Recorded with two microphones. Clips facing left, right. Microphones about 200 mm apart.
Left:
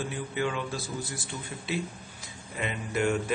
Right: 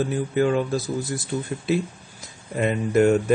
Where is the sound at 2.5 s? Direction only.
45° right (ahead or behind).